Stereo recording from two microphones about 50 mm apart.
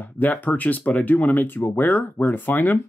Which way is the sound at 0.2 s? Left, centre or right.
Left.